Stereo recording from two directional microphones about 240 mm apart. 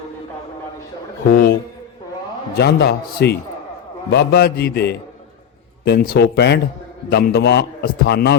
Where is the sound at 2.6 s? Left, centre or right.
Left.